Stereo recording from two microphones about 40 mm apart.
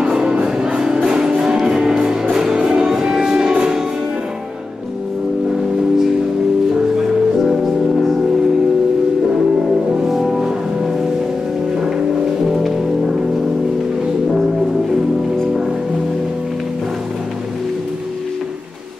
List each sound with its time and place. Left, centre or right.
0.0 s music: centre
10.0 s music: centre
12.4 s music: centre